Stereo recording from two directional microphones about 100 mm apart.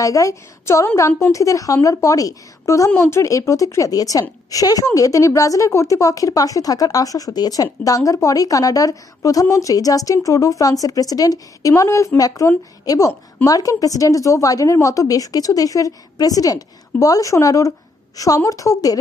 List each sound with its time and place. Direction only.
0.0 s a woman's voice: 35° left (ahead or behind)